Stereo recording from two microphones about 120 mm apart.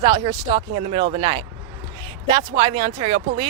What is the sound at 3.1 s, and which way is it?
Speech, 55° right (ahead or behind).